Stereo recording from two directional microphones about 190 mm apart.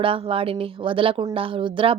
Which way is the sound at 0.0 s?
30° right (ahead or behind).